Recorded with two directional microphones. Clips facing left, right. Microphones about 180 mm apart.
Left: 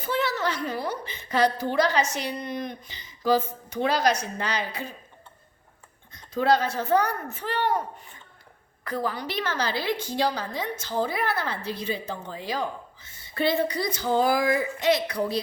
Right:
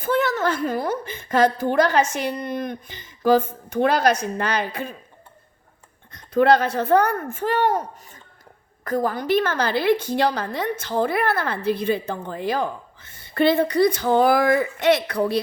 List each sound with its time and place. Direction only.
0.0 s a woman's voice: 50° right (ahead or behind)
6.1 s a woman's voice: 60° right (ahead or behind)